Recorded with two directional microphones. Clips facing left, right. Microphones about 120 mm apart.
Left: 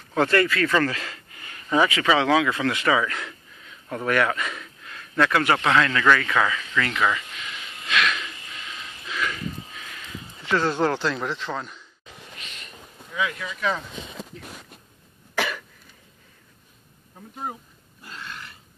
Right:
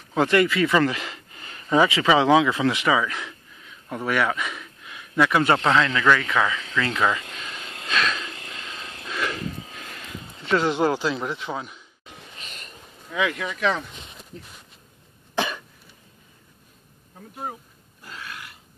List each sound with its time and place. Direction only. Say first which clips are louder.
0.1 s speech: right 1 dB; 15° right (ahead or behind)
7.3 s vehicle: right 1 dB; 40° right (ahead or behind)
7.9 s wheeze: left 1 dB; 30° right (ahead or behind)
9.1 s a sound: right 1 dB; 30° right (ahead or behind)
10.5 s speech: right 1 dB; 15° right (ahead or behind)
12.4 s train: right 1 dB; 40° right (ahead or behind)
13.1 s speech: right 3 dB; 85° right
14.1 s speech: left 5 dB; 90° left
15.3 s cough: right 1 dB; 20° right (ahead or behind)
18.1 s grunt: even; 5° right (ahead or behind)